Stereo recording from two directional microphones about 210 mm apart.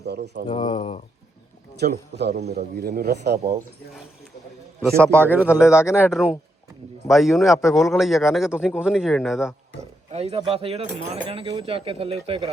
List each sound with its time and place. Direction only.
0.0 s a man's voice: 50° right (ahead or behind)
0.4 s speech: 25° left (ahead or behind)
1.8 s a man's voice: 45° right (ahead or behind)
4.8 s a man's voice: 10° right (ahead or behind)
10.1 s speech: 30° right (ahead or behind)